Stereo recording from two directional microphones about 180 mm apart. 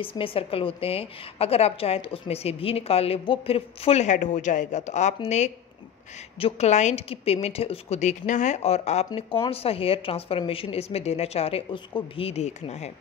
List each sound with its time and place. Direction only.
0.0 s a woman's voice: 30° left (ahead or behind)
6.4 s a woman's voice: 40° left (ahead or behind)